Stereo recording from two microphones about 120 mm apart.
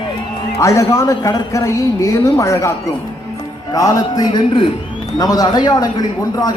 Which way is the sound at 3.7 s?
30° left (ahead or behind).